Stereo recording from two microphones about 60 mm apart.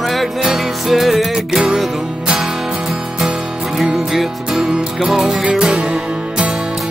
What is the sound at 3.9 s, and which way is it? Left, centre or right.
Music, centre.